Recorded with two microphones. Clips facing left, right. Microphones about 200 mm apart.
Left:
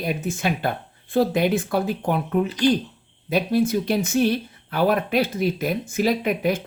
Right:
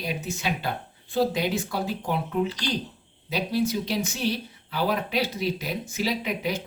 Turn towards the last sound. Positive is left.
turn(degrees=50)  # may be behind; listen again after turning